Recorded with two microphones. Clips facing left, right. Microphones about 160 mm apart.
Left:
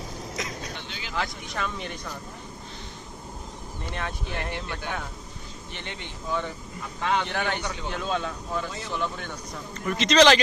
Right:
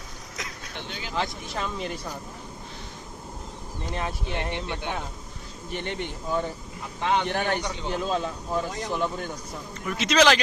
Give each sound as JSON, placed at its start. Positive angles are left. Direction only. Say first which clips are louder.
{"t": 0.3, "sound": "vehicle", "louder": "left 4 dB", "side_deg": 0}
{"t": 1.5, "sound": "speech", "louder": "right 1 dB", "side_deg": -30}
{"t": 3.8, "sound": "speech", "louder": "right 3 dB", "side_deg": -30}
{"t": 5.7, "sound": "speech", "louder": "right 9 dB", "side_deg": -50}
{"t": 7.0, "sound": "speech", "louder": "right 1 dB", "side_deg": -25}
{"t": 7.3, "sound": "speech", "louder": "right 2 dB", "side_deg": -40}
{"t": 9.8, "sound": "a man's voice", "louder": "left 2 dB", "side_deg": -5}